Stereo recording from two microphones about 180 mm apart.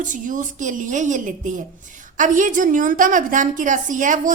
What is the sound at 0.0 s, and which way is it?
A woman's voice, 45° right (ahead or behind).